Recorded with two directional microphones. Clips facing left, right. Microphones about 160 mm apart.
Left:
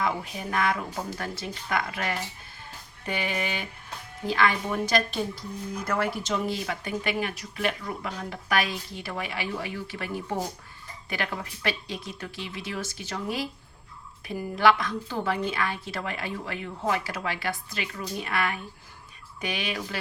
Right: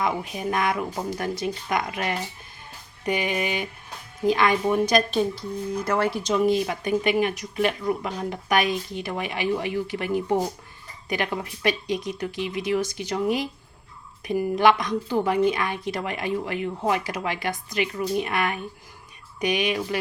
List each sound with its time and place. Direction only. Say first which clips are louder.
0.0 s a woman's voice: right 3 dB; 15° right (ahead or behind)